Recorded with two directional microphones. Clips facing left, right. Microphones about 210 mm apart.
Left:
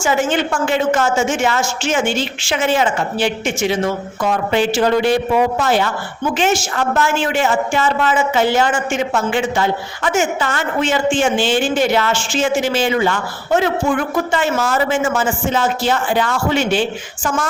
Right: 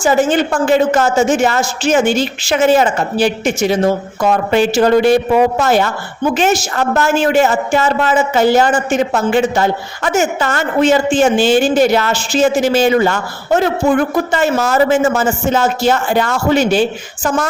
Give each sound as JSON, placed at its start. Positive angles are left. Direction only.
{"t": 0.0, "sound": "a woman's voice", "side_deg": -35}